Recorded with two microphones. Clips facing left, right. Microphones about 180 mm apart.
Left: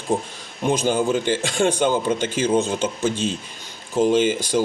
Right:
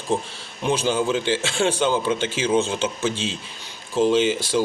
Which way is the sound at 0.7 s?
50° left (ahead or behind).